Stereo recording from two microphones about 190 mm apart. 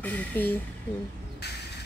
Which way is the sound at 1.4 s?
60° left (ahead or behind).